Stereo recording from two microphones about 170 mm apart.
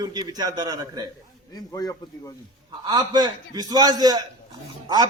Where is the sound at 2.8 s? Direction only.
25° right (ahead or behind).